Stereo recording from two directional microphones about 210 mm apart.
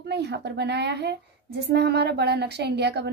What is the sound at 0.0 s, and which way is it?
A woman's voice, 55° right (ahead or behind).